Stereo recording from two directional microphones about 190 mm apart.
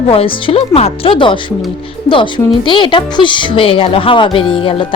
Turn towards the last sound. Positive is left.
turn(degrees=25)  # may be behind; listen again after turning